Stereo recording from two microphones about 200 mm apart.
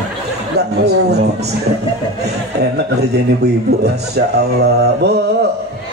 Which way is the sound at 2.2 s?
55° right (ahead or behind).